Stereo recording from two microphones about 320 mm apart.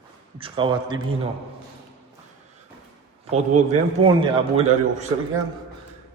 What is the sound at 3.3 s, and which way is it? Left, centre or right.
Speech, right.